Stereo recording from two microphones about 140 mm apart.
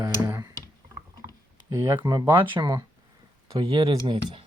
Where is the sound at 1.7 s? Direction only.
20° right (ahead or behind).